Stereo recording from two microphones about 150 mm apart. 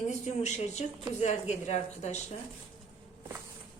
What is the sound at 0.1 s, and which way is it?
A woman's voice, 50° left (ahead or behind).